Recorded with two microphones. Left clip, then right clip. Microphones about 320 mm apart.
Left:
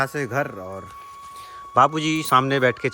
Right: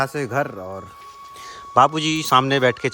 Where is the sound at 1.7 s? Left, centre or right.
Centre.